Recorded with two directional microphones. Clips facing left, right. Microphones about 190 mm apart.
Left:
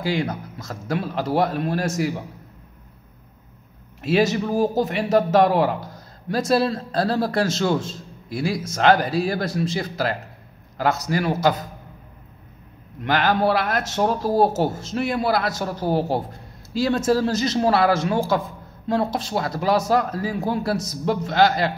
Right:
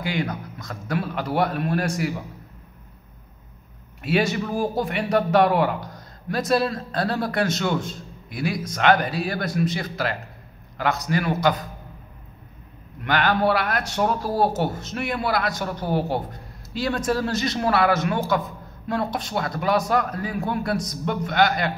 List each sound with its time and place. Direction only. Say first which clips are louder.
0.0 s a man's voice: left 3 dB; 25° left (ahead or behind)
4.0 s a man's voice: left 3 dB; 25° left (ahead or behind)
13.0 s a man's voice: left 1 dB; 25° left (ahead or behind)